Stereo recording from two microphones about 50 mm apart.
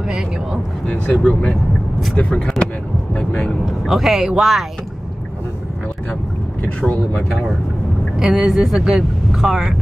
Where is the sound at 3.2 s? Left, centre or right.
Centre.